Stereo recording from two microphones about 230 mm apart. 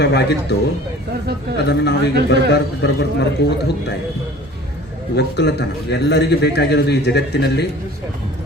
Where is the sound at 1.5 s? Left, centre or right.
Left.